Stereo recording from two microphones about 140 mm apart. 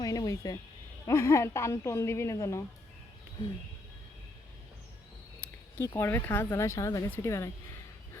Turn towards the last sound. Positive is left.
turn(degrees=20)  # may be behind; listen again after turning